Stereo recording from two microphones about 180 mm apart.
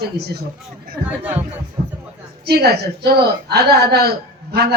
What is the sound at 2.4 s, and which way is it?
A woman's voice, 60° right (ahead or behind).